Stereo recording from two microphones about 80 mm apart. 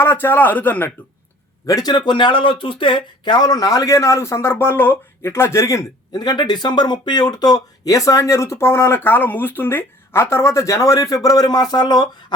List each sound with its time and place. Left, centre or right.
0.0 s a man's voice: left
1.6 s a man's voice: left
1.9 s speech: left
6.1 s speech: left